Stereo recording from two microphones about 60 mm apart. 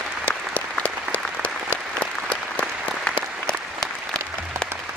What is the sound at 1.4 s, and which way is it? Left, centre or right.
Applause, centre.